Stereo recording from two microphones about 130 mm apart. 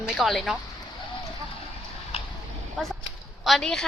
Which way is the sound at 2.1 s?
50° left (ahead or behind).